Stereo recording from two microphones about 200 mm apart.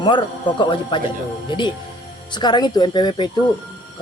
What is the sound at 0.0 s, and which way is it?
Speech, 25° left (ahead or behind).